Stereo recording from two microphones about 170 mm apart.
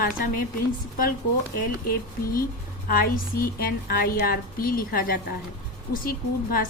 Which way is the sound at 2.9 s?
60° left (ahead or behind).